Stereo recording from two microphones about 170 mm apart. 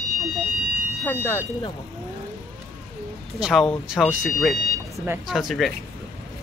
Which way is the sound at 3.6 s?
5° left (ahead or behind).